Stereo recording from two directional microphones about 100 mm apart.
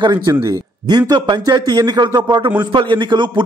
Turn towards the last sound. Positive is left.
turn(degrees=-50)  # may be behind; listen again after turning